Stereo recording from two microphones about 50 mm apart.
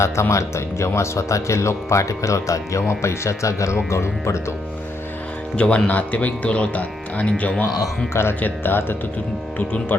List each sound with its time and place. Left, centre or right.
0.0 s speech: left
3.8 s speech: left
5.5 s speech: left
8.1 s speech: left
8.4 s speech: left